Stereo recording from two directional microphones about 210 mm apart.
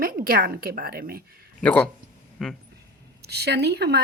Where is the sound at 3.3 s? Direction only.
50° right (ahead or behind).